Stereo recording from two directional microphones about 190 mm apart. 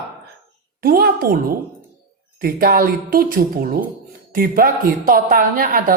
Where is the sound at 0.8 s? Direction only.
50° right (ahead or behind).